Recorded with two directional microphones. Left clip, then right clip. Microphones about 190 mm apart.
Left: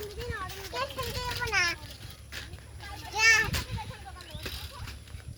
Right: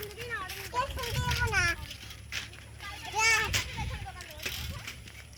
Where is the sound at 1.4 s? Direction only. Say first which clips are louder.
Left 1 dB; 10° left (ahead or behind).